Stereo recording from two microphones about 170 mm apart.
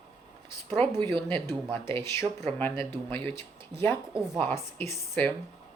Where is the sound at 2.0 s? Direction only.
15° left (ahead or behind).